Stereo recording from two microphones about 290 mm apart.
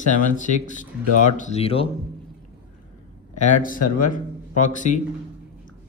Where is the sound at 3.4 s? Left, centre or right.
Left.